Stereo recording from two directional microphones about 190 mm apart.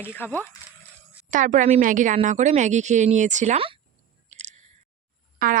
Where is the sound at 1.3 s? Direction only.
40° right (ahead or behind).